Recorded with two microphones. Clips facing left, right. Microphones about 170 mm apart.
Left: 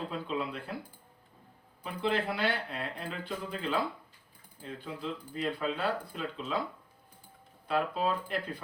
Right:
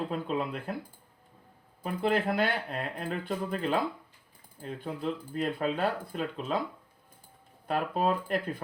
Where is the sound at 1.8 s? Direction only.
50° right (ahead or behind).